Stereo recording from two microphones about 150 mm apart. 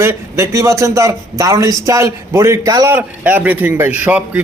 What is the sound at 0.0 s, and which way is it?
Speech, 15° right (ahead or behind).